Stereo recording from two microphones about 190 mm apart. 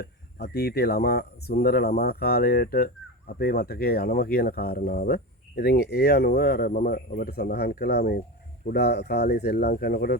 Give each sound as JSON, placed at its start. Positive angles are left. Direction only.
{"t": 0.0, "sound": "speech", "side_deg": 60}